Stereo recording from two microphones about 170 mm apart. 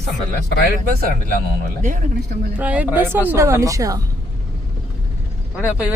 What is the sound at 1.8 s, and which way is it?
Speech, 50° right (ahead or behind).